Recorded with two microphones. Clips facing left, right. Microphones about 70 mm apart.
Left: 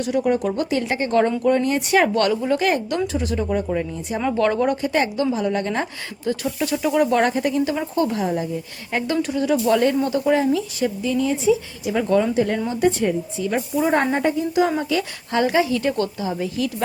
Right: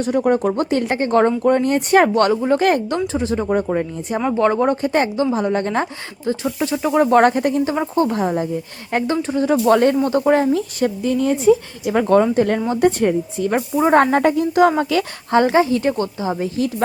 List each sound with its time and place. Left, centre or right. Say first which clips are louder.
0.0 s speech: right 3 dB; right
2.6 s speech: right 4 dB; right
3.1 s speech: right 3 dB; right
4.3 s speech: right 3 dB; right
7.6 s speech: right 3 dB; right
13.9 s a woman's voice: right 8 dB; right
15.3 s speech: right 4 dB; right